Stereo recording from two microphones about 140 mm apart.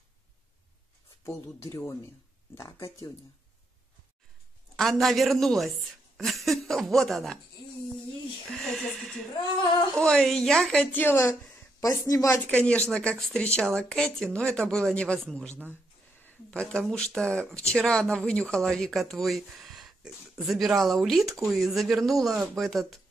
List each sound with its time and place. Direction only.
1.2 s speech: 20° left (ahead or behind)
4.7 s speech: centre (ahead or behind)
8.6 s speech: centre (ahead or behind); by 12.4 s 25° left (ahead or behind)
12.4 s speech: 10° left (ahead or behind)